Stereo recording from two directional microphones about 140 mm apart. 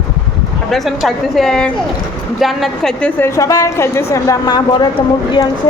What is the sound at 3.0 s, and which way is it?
A woman's voice, 20° left (ahead or behind).